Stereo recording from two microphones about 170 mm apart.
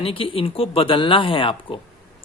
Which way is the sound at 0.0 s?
30° left (ahead or behind).